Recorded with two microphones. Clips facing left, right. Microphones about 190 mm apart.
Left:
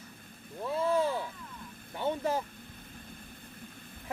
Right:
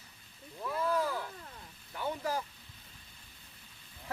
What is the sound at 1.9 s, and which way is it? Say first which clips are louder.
Vehicle: left 4 dB; 25° left (ahead or behind).